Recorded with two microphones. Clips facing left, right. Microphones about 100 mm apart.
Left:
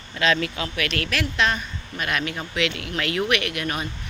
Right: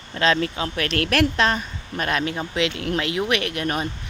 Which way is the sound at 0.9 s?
55° right (ahead or behind).